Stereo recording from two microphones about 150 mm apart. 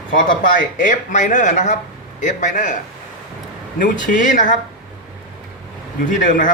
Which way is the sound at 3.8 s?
60° left (ahead or behind).